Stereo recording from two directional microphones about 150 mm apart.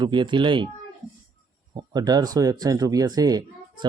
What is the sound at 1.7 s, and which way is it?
Speech, 30° right (ahead or behind).